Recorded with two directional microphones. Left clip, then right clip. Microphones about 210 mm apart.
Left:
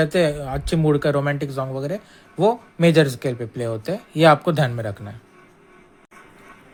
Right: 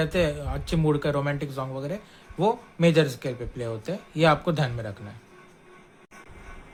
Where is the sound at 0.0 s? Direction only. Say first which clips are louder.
Left 6 dB; 25° left (ahead or behind).